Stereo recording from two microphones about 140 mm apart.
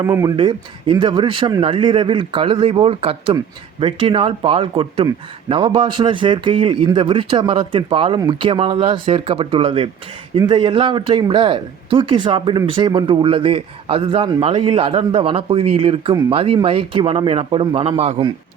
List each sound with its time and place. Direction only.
0.0 s speech: 25° right (ahead or behind)
0.3 s speech: 35° right (ahead or behind)